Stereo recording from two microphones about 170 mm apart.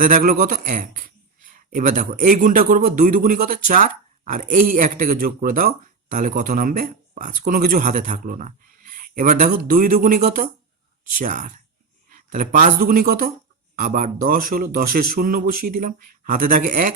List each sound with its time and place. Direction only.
0.0 s speech: 55° right (ahead or behind)